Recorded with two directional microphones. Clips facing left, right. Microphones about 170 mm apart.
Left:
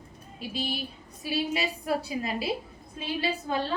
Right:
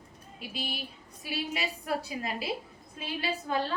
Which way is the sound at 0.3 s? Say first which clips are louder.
Left 5 dB; 30° left (ahead or behind).